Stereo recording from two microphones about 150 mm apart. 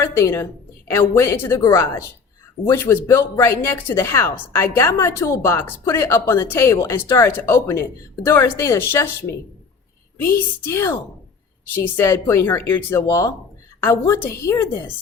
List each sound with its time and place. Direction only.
0.0 s a woman's voice: 20° left (ahead or behind)
10.3 s speech: 15° left (ahead or behind)
11.9 s a woman's voice: 15° left (ahead or behind)